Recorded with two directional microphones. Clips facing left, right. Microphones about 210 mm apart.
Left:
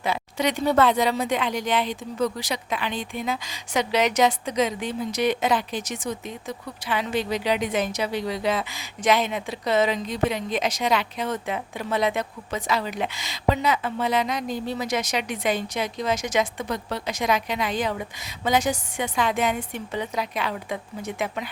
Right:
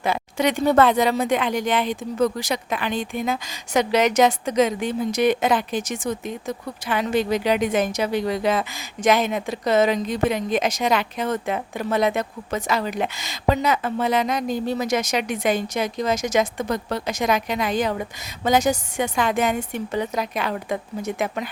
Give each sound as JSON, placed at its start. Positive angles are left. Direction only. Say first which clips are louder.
{"t": 0.0, "sound": "speech", "louder": "right 3 dB", "side_deg": -50}